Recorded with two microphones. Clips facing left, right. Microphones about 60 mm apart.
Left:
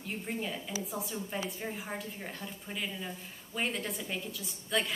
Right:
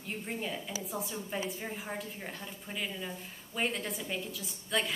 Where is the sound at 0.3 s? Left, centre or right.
Centre.